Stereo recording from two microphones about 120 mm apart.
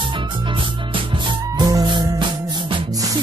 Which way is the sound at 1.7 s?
35° right (ahead or behind).